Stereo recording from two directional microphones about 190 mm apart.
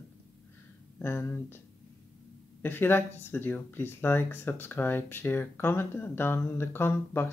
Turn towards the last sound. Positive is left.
turn(degrees=10)  # may be behind; listen again after turning